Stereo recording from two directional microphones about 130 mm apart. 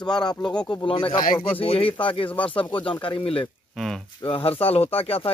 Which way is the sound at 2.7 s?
40° left (ahead or behind).